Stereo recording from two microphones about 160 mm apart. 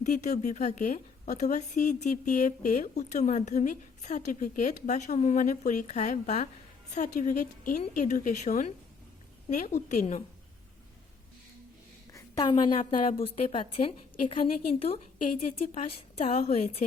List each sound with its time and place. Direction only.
0.0 s a woman's voice: 50° left (ahead or behind)
12.1 s a sound: 25° left (ahead or behind)
12.9 s a woman's voice: 35° left (ahead or behind)